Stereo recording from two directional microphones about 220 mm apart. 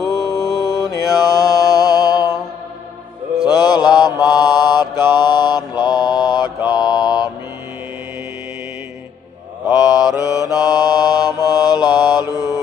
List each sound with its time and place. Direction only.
0.3 s mantra: 15° left (ahead or behind)
3.4 s mantra: 20° left (ahead or behind)
9.7 s mantra: 20° left (ahead or behind)